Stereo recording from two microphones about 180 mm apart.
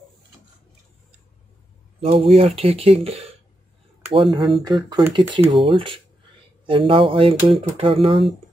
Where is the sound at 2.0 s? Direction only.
35° right (ahead or behind).